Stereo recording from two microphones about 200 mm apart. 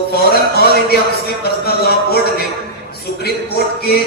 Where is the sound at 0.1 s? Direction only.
50° left (ahead or behind).